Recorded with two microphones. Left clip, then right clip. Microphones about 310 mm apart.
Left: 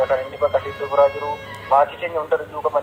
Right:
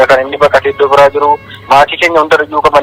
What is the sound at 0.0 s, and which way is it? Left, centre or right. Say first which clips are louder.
Speech: right 13 dB; right.